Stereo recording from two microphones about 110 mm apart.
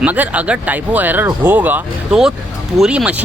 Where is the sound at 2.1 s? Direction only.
5° right (ahead or behind).